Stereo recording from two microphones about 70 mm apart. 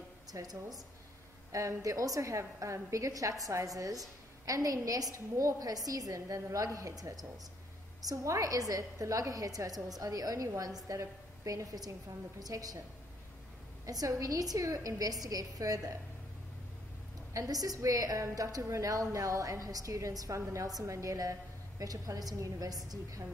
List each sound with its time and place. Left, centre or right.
0.3 s a woman's voice: right
1.5 s a woman's voice: right
13.8 s a woman's voice: right
17.3 s a woman's voice: right